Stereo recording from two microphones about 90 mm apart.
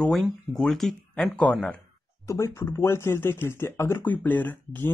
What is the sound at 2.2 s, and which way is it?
Speech, 35° left (ahead or behind).